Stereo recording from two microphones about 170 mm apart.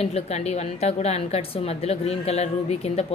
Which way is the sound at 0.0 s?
35° left (ahead or behind).